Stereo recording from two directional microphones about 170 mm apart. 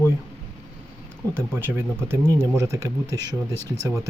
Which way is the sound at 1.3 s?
15° right (ahead or behind).